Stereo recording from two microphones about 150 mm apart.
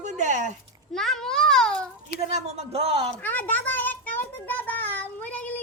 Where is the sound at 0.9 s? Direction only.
5° left (ahead or behind).